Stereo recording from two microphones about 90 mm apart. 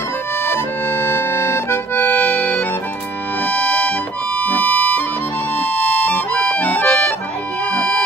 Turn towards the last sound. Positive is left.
turn(degrees=10)  # may be behind; listen again after turning